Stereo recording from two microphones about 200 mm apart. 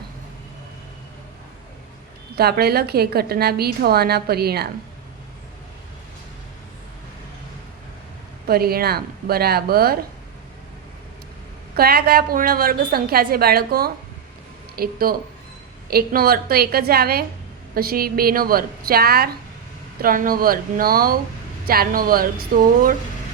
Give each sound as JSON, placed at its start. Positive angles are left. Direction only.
{"t": 2.3, "sound": "a woman's voice", "side_deg": -50}
{"t": 8.4, "sound": "a woman's voice", "side_deg": -50}
{"t": 11.7, "sound": "a woman's voice", "side_deg": -50}